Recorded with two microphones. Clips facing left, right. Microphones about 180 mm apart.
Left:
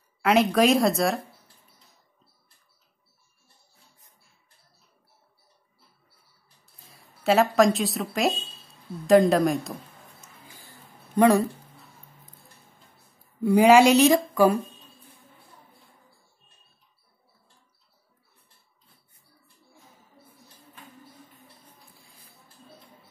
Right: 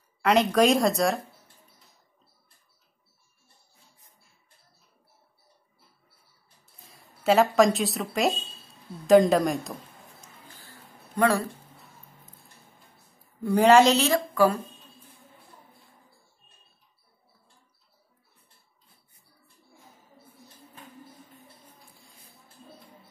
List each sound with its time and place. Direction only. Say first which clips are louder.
0.2 s a woman's voice: left 1 dB; 5° left (ahead or behind)
6.8 s a woman's voice: left 1 dB; centre (ahead or behind)
11.1 s speech: left 5 dB; 20° left (ahead or behind)
13.4 s a woman's voice: left 2 dB; 10° left (ahead or behind)